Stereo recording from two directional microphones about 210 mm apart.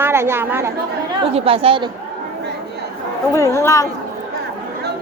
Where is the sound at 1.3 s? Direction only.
25° right (ahead or behind).